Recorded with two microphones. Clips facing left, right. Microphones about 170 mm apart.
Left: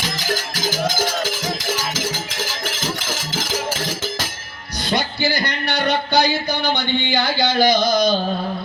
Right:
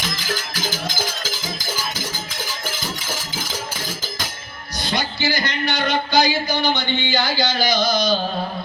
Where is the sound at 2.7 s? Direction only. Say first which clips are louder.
Left 2 dB; 85° left.